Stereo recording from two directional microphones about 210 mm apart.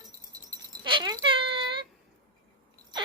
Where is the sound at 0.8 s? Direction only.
20° right (ahead or behind).